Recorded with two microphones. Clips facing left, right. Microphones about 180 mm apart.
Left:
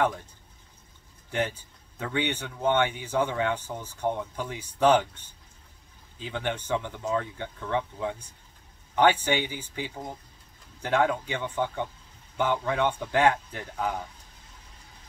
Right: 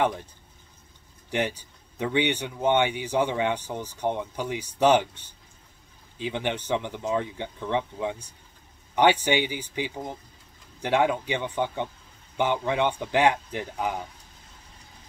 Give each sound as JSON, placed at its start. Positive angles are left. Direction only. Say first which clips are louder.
{"t": 2.0, "sound": "speech", "louder": "right 4 dB", "side_deg": -15}
{"t": 6.2, "sound": "speech", "louder": "right 3 dB", "side_deg": -20}